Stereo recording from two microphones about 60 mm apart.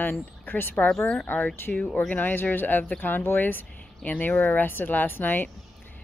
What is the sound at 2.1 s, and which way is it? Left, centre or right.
Speech, left.